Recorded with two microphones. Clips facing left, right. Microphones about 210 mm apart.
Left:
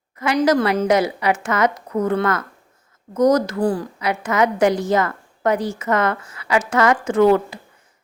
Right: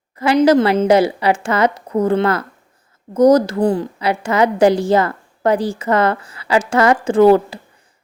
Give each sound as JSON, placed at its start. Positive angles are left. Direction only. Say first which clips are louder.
{"t": 0.2, "sound": "a woman's voice", "louder": "right 5 dB", "side_deg": -30}